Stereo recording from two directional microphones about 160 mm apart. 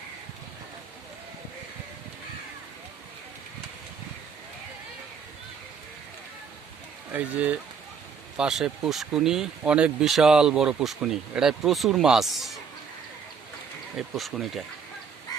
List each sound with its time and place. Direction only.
7.1 s speech: 10° right (ahead or behind)
13.9 s speech: centre (ahead or behind)
15.3 s duck: 25° left (ahead or behind)